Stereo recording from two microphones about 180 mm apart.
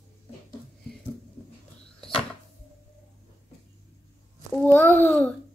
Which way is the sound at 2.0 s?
30° left (ahead or behind).